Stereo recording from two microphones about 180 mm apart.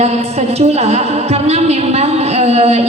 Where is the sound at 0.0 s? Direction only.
35° right (ahead or behind).